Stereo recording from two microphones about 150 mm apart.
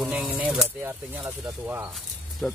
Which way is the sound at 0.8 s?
15° right (ahead or behind).